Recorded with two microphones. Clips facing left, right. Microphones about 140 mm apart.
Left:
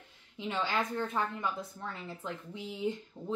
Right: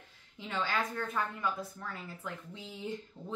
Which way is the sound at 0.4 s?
20° left (ahead or behind).